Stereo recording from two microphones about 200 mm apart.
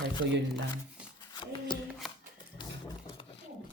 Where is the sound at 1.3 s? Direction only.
20° left (ahead or behind).